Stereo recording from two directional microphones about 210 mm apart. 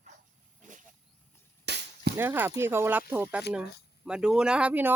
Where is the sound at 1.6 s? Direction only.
50° right (ahead or behind).